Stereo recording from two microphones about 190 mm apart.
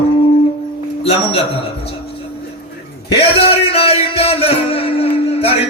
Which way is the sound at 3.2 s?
30° left (ahead or behind).